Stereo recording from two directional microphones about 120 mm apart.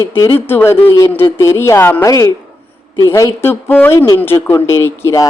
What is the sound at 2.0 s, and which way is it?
Speech, 30° left (ahead or behind).